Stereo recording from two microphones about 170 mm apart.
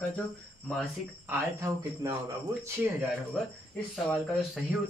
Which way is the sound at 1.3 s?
15° right (ahead or behind).